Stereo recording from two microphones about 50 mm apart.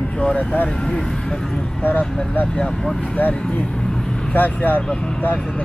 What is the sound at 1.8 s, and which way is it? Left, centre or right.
Speech, left.